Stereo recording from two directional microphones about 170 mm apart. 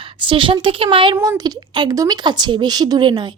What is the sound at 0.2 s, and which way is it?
Speech, 30° right (ahead or behind).